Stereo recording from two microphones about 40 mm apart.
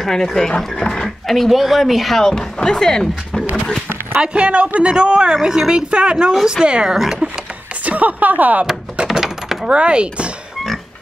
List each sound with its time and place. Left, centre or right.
0.0 s speech: centre
0.7 s speech: left
1.0 s speech: centre
2.2 s speech: centre
4.2 s speech: right
5.3 s speech: centre
7.8 s speech: right
9.0 s a sound: centre
9.7 s speech: right